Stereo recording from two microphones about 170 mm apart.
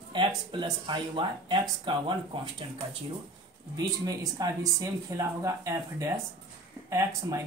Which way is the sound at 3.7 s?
20° right (ahead or behind).